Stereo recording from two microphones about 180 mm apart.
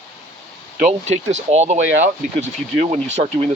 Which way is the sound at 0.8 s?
40° right (ahead or behind).